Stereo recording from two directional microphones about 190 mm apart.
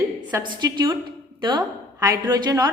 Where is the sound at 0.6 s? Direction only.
20° right (ahead or behind).